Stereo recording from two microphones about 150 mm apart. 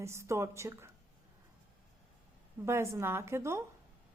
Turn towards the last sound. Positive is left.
turn(degrees=-20)  # may be behind; listen again after turning